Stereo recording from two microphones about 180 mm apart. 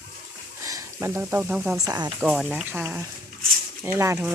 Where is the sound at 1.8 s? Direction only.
20° right (ahead or behind).